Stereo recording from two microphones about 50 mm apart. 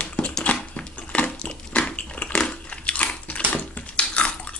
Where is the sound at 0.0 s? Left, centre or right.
Left.